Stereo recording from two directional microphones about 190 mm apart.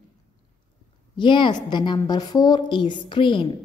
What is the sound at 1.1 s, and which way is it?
A woman's voice, 25° left (ahead or behind).